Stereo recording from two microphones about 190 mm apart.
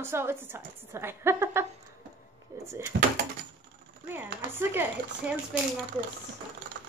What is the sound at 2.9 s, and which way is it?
Speech, 60° right (ahead or behind).